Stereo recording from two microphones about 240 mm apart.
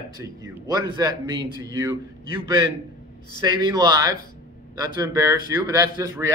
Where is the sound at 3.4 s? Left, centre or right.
Centre.